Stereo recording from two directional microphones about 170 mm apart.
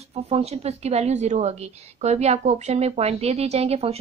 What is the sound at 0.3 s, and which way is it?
A woman's voice, 35° right (ahead or behind).